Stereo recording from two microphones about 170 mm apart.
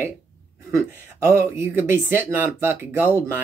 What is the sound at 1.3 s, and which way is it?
Speech, 15° right (ahead or behind).